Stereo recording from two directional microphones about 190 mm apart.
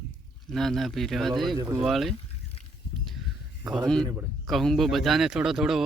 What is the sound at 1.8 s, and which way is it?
Speech, centre (ahead or behind).